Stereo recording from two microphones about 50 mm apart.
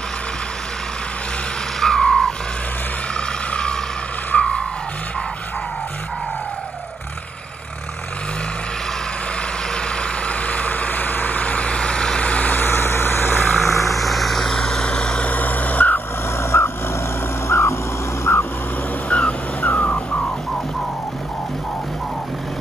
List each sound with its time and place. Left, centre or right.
1.8 s vehicle: centre
9.8 s vehicle: centre
10.4 s vehicle: left
12.2 s vehicle: left
12.5 s vehicle: left
13.6 s vehicle: left
13.8 s vehicle: centre
15.2 s crow: left
16.3 s vehicle: left
18.2 s vehicle: left
19.0 s music: left